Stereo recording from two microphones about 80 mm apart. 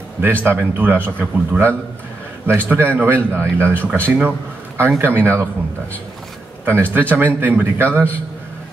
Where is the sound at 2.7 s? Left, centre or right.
Right.